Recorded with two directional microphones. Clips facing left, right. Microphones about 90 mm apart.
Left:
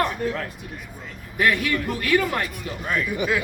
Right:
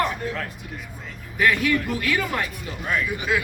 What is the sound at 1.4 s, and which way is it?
Speech, 45° left (ahead or behind).